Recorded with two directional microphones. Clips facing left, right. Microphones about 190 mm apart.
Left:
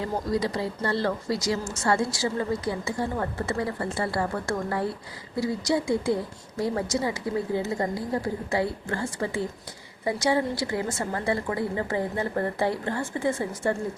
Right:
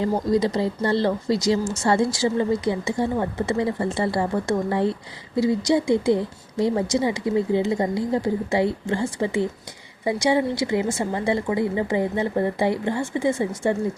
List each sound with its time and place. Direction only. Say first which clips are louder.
0.0 s speech: right 6 dB; 25° right (ahead or behind)